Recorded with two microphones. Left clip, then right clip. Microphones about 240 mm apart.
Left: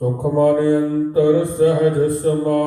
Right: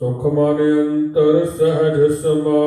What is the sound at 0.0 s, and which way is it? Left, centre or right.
Mantra, left.